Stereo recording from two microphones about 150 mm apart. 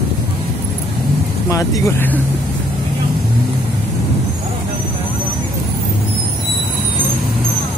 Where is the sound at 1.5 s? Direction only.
20° left (ahead or behind).